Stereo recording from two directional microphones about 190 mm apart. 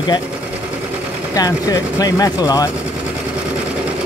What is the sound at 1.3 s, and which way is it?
Speech, 20° left (ahead or behind).